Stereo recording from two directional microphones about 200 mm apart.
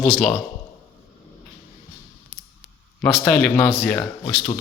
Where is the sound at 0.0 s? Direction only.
5° left (ahead or behind).